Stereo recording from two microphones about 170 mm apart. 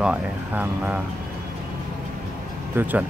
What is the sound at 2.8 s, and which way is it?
Speech, 10° right (ahead or behind).